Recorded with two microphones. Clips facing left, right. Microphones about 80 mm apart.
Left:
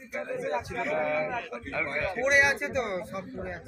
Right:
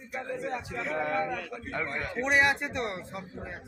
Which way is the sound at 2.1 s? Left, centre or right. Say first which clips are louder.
Left 1 dB; centre.